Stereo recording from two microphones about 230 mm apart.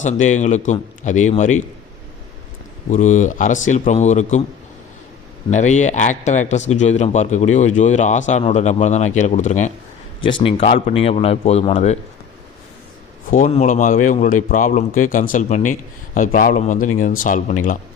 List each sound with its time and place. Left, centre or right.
0.0 s a man's voice: left
2.9 s a man's voice: left
5.5 s a man's voice: left
10.2 s a man's voice: left
13.3 s a man's voice: left